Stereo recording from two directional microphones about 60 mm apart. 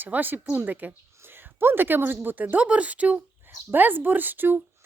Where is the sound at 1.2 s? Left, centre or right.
Right.